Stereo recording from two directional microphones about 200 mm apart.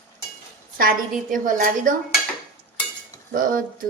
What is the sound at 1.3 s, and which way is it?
Speech, 40° right (ahead or behind).